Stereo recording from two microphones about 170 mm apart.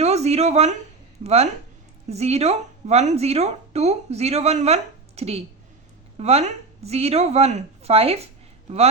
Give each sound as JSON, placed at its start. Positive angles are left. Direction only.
{"t": 0.0, "sound": "speech", "side_deg": -40}